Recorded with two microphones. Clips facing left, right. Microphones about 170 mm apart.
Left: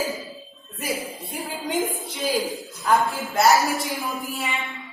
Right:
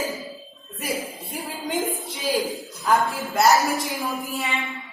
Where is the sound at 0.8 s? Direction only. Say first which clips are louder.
Even; centre (ahead or behind).